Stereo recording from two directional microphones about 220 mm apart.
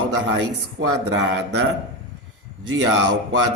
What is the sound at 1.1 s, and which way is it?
Speech, 50° right (ahead or behind).